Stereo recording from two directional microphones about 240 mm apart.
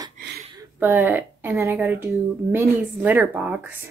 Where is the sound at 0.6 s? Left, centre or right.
Centre.